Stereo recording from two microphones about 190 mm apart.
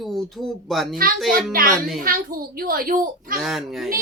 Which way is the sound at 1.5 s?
50° right (ahead or behind).